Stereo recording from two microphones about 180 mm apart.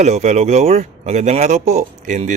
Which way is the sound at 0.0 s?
40° right (ahead or behind).